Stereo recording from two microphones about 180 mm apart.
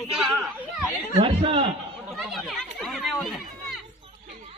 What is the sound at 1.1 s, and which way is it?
Speech, 30° right (ahead or behind).